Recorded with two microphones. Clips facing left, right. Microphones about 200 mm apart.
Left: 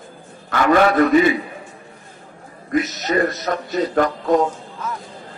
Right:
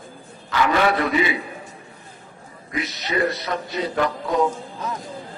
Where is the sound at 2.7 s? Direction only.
45° left (ahead or behind).